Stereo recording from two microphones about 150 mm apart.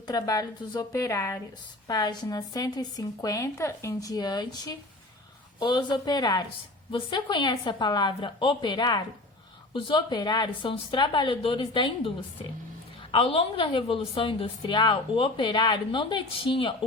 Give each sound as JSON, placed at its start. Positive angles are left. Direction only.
{"t": 0.1, "sound": "a woman's voice", "side_deg": 25}